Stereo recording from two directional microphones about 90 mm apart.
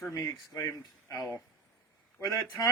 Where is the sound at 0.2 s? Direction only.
25° left (ahead or behind).